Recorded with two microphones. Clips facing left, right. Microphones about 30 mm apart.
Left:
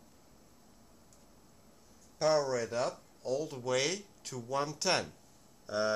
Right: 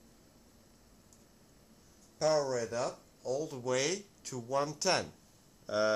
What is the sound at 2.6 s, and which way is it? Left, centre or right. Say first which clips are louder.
Speech: left 1 dB; left.